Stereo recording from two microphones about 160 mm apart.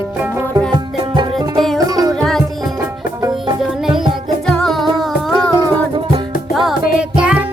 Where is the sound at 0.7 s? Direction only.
30° right (ahead or behind).